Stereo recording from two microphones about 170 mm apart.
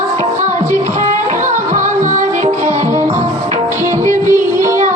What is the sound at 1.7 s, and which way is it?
Music, 50° right (ahead or behind).